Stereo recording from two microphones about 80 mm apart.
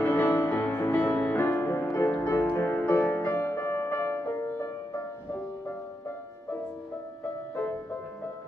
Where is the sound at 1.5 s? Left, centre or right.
Left.